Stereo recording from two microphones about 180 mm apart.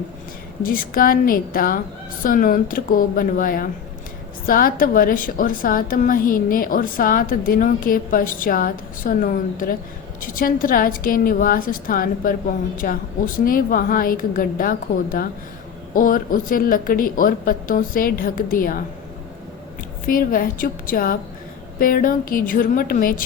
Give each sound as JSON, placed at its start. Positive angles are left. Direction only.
{"t": 0.6, "sound": "a woman's voice", "side_deg": 50}
{"t": 20.1, "sound": "a woman's voice", "side_deg": 50}